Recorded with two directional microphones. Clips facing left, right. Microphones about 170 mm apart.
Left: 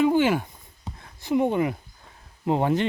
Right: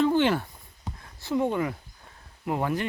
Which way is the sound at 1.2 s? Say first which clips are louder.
Left 4 dB; 15° left (ahead or behind).